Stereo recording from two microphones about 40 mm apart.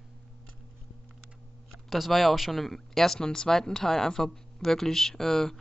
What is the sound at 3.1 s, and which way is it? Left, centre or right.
Speech, centre.